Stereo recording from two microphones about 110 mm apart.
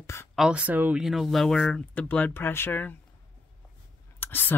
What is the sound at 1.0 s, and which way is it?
Speech, centre (ahead or behind).